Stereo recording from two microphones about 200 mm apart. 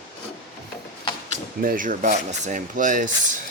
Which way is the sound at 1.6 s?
45° right (ahead or behind).